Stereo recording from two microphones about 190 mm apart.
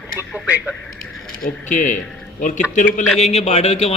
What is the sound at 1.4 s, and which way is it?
Speech, 40° left (ahead or behind).